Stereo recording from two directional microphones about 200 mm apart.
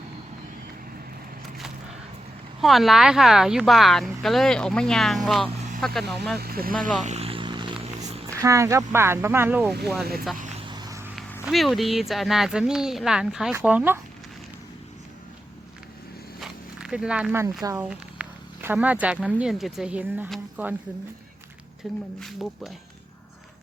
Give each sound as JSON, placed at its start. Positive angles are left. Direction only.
{"t": 2.6, "sound": "speech", "side_deg": 0}
{"t": 6.4, "sound": "speech", "side_deg": -50}
{"t": 7.0, "sound": "vehicle", "side_deg": -35}
{"t": 8.3, "sound": "speech", "side_deg": -15}
{"t": 10.7, "sound": "vehicle", "side_deg": -20}
{"t": 11.4, "sound": "speech", "side_deg": 0}
{"t": 16.4, "sound": "a sound", "side_deg": -5}
{"t": 17.6, "sound": "speech", "side_deg": -15}
{"t": 17.8, "sound": "a sound", "side_deg": -10}
{"t": 19.4, "sound": "speech", "side_deg": 0}
{"t": 21.8, "sound": "speech", "side_deg": 0}